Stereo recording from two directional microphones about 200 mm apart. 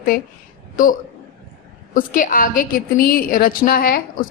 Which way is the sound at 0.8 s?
45° left (ahead or behind).